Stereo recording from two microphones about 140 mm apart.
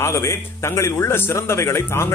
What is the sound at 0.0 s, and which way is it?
A man's voice, 20° left (ahead or behind).